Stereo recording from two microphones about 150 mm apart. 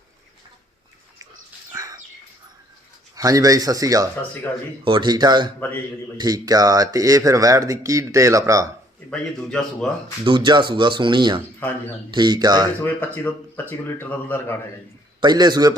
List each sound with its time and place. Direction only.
1.7 s bird: 25° right (ahead or behind)
3.2 s speech: 25° right (ahead or behind)
5.5 s speech: 15° left (ahead or behind)
6.1 s speech: 25° right (ahead or behind)
9.0 s a man's voice: 5° left (ahead or behind)
10.2 s speech: 30° right (ahead or behind)
12.8 s speech: 10° left (ahead or behind)
15.2 s speech: 30° right (ahead or behind)